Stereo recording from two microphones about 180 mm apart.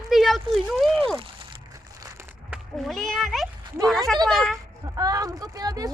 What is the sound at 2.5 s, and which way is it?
Speech, centre (ahead or behind).